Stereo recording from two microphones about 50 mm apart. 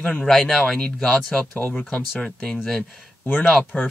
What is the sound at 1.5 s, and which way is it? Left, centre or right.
Speech, left.